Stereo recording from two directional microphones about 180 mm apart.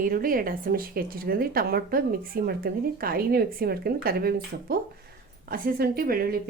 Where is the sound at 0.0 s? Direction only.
50° right (ahead or behind).